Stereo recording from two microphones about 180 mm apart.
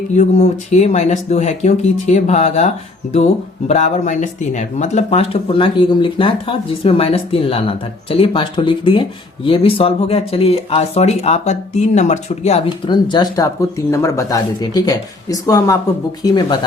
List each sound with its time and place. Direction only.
0.1 s speech: 40° left (ahead or behind)
3.7 s speech: 40° left (ahead or behind); by 16.6 s 25° left (ahead or behind)